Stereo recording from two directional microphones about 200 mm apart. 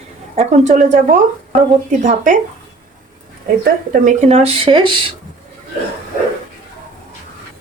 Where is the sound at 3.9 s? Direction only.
40° right (ahead or behind).